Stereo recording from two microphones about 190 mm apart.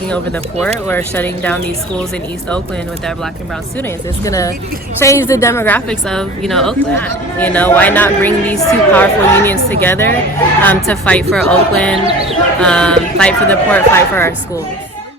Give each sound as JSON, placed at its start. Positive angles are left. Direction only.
{"t": 0.6, "sound": "a woman's voice", "side_deg": 10}
{"t": 4.2, "sound": "a woman's voice", "side_deg": 15}